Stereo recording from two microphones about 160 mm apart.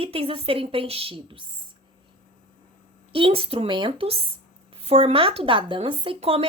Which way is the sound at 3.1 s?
35° right (ahead or behind).